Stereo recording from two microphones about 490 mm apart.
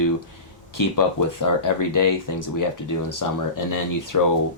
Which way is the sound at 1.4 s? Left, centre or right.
Left.